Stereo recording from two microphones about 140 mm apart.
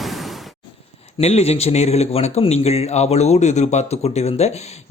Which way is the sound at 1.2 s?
50° left (ahead or behind).